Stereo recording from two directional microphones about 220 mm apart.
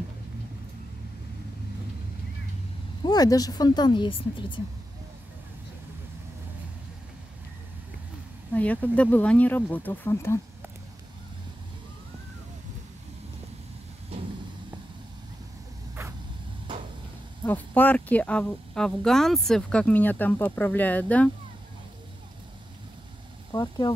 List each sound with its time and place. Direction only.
3.0 s speech: 15° left (ahead or behind)
8.5 s speech: 5° left (ahead or behind)
17.5 s speech: 10° left (ahead or behind)
23.5 s speech: 20° left (ahead or behind)